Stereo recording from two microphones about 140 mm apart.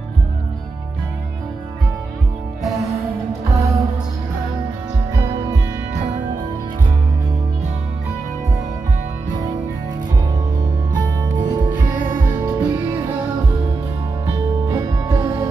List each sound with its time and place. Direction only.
3.5 s music: 25° right (ahead or behind)
5.1 s music: 20° right (ahead or behind)
10.9 s music: 35° right (ahead or behind)
12.4 s music: 15° right (ahead or behind)
14.2 s music: 25° right (ahead or behind)